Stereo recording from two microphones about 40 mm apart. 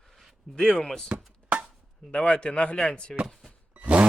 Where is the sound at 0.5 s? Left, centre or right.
Left.